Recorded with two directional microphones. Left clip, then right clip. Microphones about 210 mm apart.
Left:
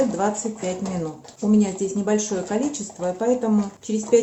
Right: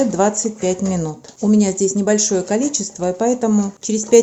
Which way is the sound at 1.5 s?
40° right (ahead or behind).